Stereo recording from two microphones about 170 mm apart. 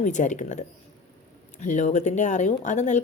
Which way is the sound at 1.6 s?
45° left (ahead or behind).